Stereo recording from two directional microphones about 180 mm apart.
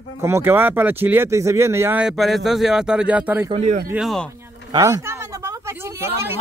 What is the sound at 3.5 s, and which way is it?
Speech, 35° right (ahead or behind).